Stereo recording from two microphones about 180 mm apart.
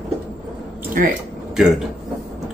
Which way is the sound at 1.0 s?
50° right (ahead or behind).